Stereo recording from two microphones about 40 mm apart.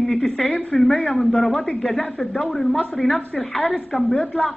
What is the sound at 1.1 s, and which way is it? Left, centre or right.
A woman's voice, centre.